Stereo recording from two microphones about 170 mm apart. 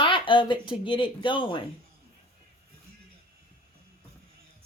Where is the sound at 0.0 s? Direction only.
30° left (ahead or behind).